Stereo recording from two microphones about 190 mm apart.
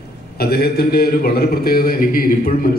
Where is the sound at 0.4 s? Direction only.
55° left (ahead or behind).